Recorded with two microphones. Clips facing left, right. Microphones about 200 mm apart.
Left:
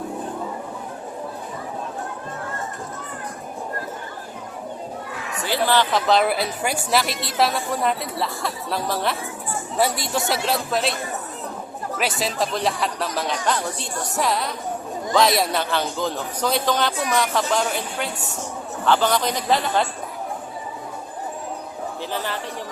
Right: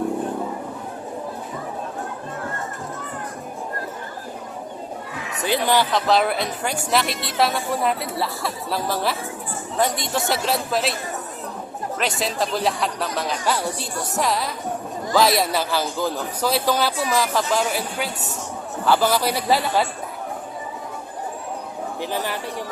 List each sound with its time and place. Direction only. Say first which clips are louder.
5.4 s a sound: right 1 dB; 15° right (ahead or behind)
5.9 s speech: even; centre (ahead or behind)
11.9 s a man's voice: even; centre (ahead or behind)
22.0 s a man's voice: right 2 dB; 10° right (ahead or behind)